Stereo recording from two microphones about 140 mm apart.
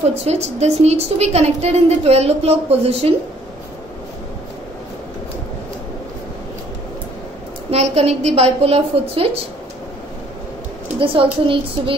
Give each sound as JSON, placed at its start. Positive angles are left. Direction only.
{"t": 0.2, "sound": "a woman's voice", "side_deg": -50}
{"t": 7.7, "sound": "a woman's voice", "side_deg": -50}
{"t": 11.0, "sound": "speech", "side_deg": -40}